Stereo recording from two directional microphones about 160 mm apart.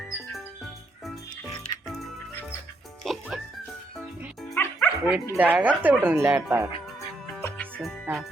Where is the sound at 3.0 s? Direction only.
Centre (ahead or behind).